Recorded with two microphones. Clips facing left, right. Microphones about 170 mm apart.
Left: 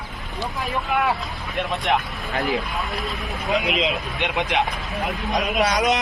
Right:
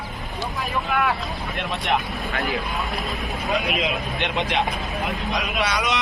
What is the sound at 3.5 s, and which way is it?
Speech, 20° left (ahead or behind).